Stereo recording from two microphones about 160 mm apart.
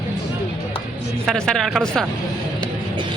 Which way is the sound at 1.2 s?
5° left (ahead or behind).